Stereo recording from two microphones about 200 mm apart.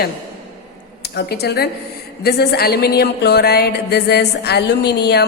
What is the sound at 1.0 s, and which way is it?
A woman's voice, 55° left (ahead or behind).